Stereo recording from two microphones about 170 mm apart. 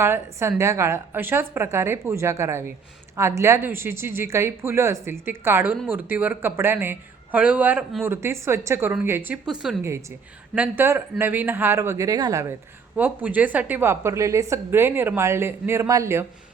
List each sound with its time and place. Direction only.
0.0 s a woman's voice: 15° right (ahead or behind)